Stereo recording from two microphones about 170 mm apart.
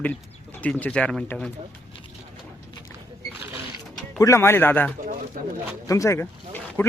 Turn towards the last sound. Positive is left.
turn(degrees=10)  # may be behind; listen again after turning